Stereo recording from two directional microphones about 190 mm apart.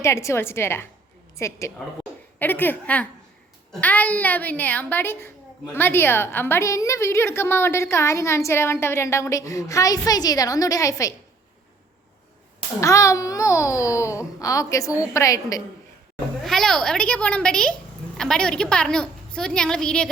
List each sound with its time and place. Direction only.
0.0 s a woman's voice: 15° left (ahead or behind)
12.8 s a woman's voice: 15° left (ahead or behind)
16.4 s a woman's voice: centre (ahead or behind)